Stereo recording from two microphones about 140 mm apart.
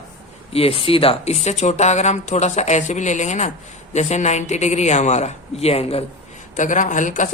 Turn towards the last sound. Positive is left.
turn(degrees=65)  # may be behind; listen again after turning